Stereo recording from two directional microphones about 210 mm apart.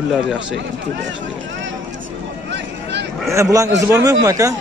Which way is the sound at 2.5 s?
55° right (ahead or behind).